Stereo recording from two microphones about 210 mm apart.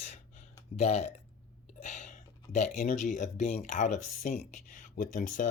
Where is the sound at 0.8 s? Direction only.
30° left (ahead or behind).